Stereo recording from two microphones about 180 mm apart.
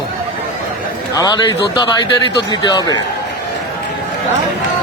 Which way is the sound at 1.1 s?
20° left (ahead or behind).